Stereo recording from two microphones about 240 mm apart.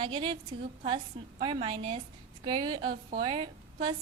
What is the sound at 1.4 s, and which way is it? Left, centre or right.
A woman's voice, right.